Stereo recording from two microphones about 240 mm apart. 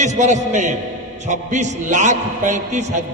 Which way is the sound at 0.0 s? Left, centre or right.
Right.